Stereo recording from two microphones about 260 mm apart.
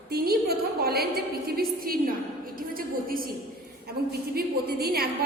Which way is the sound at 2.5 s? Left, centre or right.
Right.